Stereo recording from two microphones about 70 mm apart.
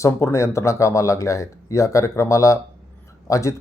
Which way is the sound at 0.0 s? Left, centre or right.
Left.